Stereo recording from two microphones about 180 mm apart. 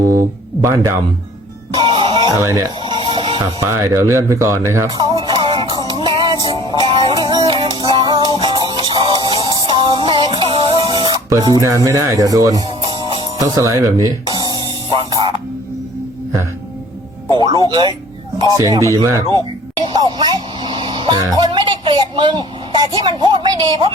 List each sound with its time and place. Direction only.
0.0 s a sound: 50° right (ahead or behind)
0.6 s speech: 15° right (ahead or behind)
1.7 s music: 25° right (ahead or behind)
3.8 s speech: 15° right (ahead or behind)
4.9 s music: 25° right (ahead or behind)
11.6 s speech: 20° right (ahead or behind)
14.6 s music: 25° right (ahead or behind)
17.7 s speech: 25° right (ahead or behind)
19.8 s a sound: 25° right (ahead or behind)
23.0 s speech: 25° right (ahead or behind)